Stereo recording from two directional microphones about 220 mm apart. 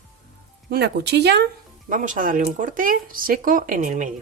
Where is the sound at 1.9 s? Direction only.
35° right (ahead or behind).